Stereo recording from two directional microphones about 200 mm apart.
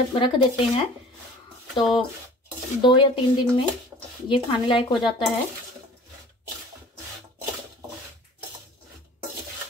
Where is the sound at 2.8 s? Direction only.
25° left (ahead or behind).